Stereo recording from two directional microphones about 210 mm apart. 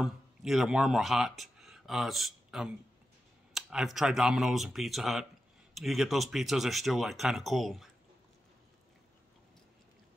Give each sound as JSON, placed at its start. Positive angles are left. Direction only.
{"t": 0.0, "sound": "speech", "side_deg": 0}